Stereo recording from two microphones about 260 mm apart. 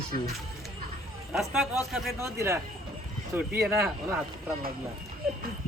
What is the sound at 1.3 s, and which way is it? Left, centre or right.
Speech, centre.